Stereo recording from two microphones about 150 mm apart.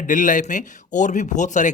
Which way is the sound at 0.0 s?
60° left (ahead or behind).